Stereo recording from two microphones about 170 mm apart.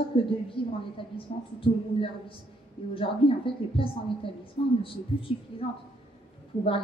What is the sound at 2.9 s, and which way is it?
A woman's voice, 30° left (ahead or behind).